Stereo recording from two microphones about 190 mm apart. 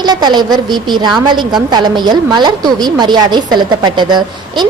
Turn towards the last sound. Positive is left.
turn(degrees=-25)  # may be behind; listen again after turning